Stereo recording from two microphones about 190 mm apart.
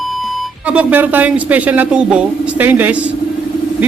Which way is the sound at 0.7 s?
10° right (ahead or behind).